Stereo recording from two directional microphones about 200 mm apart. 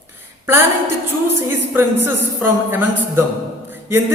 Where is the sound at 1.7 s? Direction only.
10° right (ahead or behind).